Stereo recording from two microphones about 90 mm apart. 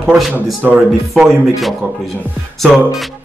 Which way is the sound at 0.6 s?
20° right (ahead or behind).